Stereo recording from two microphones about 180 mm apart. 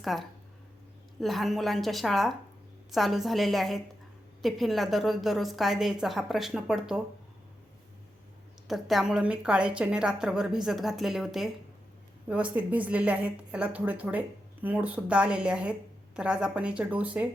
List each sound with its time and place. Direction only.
0.0 s a woman's voice: centre (ahead or behind)
8.6 s a woman's voice: centre (ahead or behind)